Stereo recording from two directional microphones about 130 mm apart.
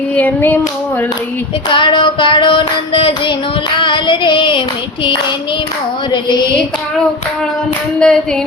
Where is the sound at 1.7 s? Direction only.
35° left (ahead or behind).